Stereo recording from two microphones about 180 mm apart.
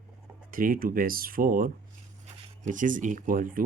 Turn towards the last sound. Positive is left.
turn(degrees=-50)  # may be behind; listen again after turning